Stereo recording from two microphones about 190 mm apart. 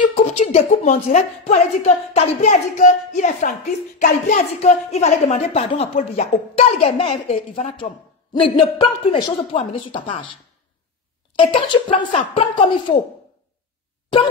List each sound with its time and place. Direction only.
0.0 s a woman's voice: 40° left (ahead or behind)
11.3 s speech: 25° left (ahead or behind)